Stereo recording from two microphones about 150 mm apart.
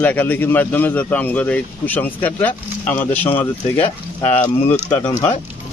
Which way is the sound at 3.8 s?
45° left (ahead or behind).